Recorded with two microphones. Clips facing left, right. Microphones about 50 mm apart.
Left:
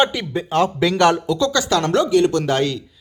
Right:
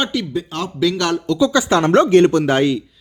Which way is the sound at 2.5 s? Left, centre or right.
Right.